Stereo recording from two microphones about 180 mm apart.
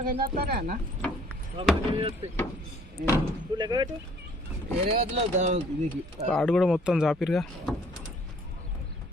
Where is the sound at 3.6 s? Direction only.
25° right (ahead or behind).